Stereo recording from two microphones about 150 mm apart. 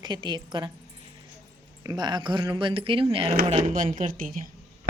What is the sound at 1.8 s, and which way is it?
Speech, 25° right (ahead or behind).